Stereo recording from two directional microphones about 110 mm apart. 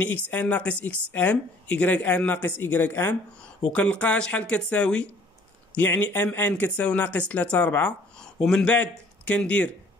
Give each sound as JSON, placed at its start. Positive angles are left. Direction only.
{"t": 0.0, "sound": "speech", "side_deg": 15}